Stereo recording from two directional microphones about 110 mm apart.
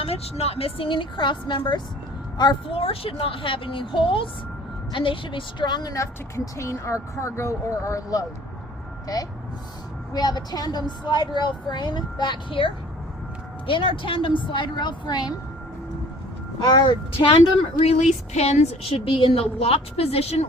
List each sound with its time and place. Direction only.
0.0 s a woman's voice: 65° left (ahead or behind); by 8.2 s 30° left (ahead or behind)
10.1 s a woman's voice: 40° left (ahead or behind)
16.6 s a woman's voice: 40° left (ahead or behind)
17.2 s a woman's voice: 60° left (ahead or behind)
17.8 s speech: 80° left
18.9 s a woman's voice: 50° left (ahead or behind); by 20.5 s 70° left (ahead or behind)